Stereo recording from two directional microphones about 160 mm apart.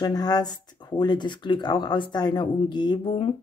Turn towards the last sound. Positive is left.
turn(degrees=30)  # may be behind; listen again after turning